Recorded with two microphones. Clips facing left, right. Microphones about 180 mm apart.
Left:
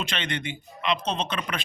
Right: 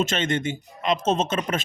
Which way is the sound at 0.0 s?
45° right (ahead or behind).